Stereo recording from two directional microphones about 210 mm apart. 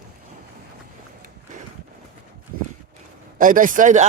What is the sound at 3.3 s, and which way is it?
Speech, 40° right (ahead or behind).